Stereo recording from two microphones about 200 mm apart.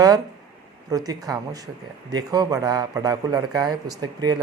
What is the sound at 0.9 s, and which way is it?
Speech, 20° right (ahead or behind).